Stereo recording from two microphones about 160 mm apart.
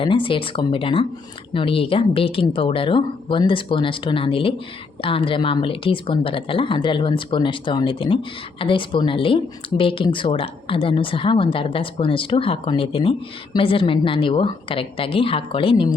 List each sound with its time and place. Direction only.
0.0 s speech: 35° left (ahead or behind)